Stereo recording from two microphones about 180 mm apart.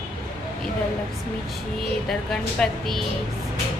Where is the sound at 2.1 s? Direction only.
Centre (ahead or behind).